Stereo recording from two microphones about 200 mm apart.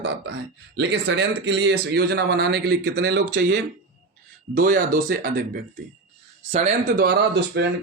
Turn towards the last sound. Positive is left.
turn(degrees=-55)  # may be behind; listen again after turning